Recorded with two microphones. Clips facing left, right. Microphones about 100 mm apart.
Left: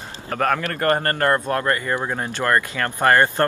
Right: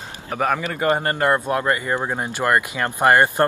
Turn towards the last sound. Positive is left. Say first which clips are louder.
# right 1 dB
turn(degrees=-15)  # may be behind; listen again after turning